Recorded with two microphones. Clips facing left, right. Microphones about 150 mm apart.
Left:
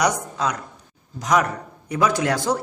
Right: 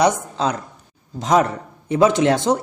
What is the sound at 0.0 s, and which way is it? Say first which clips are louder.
A man's voice: right 4 dB; 25° right (ahead or behind).